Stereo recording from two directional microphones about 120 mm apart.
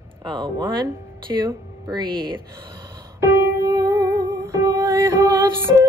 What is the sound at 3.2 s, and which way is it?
Music, 25° right (ahead or behind).